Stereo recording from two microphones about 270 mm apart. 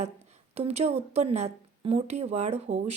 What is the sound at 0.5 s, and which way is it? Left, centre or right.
Speech, right.